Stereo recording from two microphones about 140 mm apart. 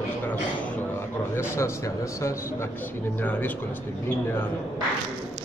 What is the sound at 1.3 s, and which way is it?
Speech, 20° left (ahead or behind).